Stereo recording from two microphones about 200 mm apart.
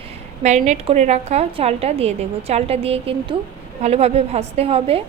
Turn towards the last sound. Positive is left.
turn(degrees=-30)  # may be behind; listen again after turning